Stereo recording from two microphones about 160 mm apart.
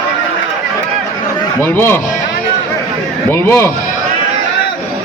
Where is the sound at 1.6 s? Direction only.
15° left (ahead or behind).